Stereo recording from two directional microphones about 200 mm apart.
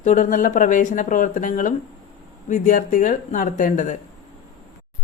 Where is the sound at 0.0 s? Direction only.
40° left (ahead or behind).